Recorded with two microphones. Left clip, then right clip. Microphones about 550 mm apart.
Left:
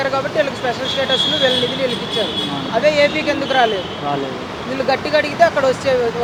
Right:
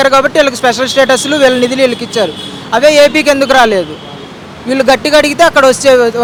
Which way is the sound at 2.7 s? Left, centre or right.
Right.